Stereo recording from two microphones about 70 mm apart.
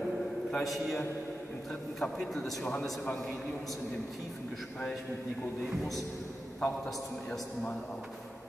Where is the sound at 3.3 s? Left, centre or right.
Centre.